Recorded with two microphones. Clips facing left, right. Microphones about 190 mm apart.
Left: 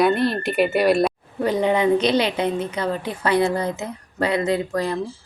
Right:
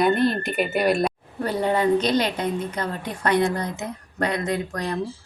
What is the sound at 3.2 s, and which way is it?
Speech, 10° left (ahead or behind).